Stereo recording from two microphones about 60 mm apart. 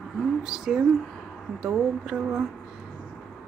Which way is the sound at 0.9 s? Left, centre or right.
Centre.